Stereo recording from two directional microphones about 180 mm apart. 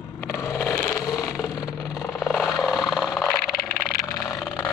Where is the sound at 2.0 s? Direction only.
Centre (ahead or behind).